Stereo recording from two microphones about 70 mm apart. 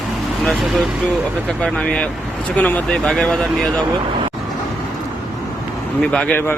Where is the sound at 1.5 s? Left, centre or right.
Centre.